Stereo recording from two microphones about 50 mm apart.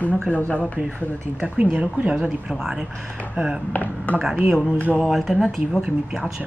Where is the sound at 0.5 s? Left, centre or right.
Left.